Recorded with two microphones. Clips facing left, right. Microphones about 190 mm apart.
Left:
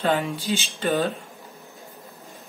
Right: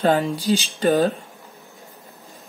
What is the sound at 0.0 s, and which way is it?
Speech, 35° right (ahead or behind).